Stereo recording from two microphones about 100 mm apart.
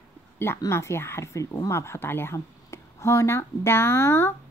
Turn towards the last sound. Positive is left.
turn(degrees=25)  # may be behind; listen again after turning